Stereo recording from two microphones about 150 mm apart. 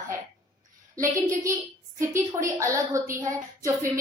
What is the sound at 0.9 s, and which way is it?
A woman's voice, 20° right (ahead or behind).